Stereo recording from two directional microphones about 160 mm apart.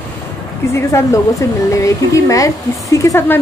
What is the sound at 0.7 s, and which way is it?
Speech, 20° left (ahead or behind).